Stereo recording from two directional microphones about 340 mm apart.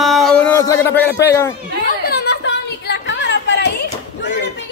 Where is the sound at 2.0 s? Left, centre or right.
Left.